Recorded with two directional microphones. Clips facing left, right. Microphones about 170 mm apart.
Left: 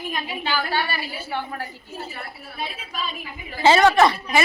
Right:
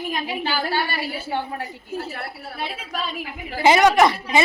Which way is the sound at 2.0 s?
65° right (ahead or behind).